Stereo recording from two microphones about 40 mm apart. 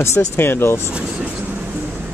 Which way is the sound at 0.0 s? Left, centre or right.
Left.